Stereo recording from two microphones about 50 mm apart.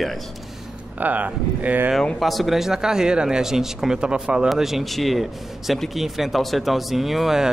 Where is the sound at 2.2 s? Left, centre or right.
Centre.